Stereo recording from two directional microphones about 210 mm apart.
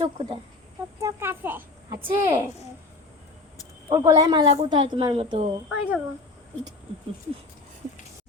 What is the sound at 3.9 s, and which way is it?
A woman's voice, 15° right (ahead or behind).